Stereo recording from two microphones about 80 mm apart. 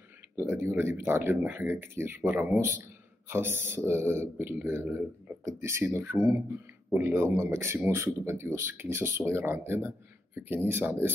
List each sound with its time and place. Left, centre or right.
0.4 s speech: right